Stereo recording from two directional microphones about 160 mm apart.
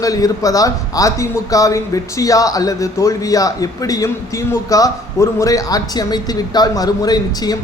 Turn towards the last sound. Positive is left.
turn(degrees=25)  # may be behind; listen again after turning